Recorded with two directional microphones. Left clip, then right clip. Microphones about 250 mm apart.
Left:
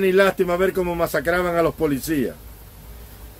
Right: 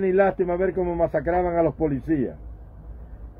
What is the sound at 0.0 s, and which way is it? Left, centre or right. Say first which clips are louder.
Speech: left 3 dB; centre.